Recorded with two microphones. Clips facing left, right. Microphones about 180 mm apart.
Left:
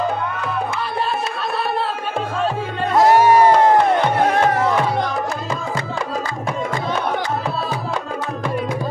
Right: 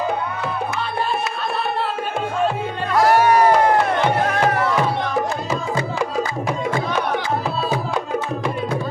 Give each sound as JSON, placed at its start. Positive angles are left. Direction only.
{"t": 2.9, "sound": "music", "side_deg": 20}